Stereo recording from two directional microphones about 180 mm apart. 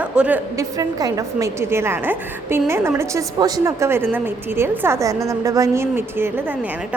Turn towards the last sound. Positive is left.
turn(degrees=-10)  # may be behind; listen again after turning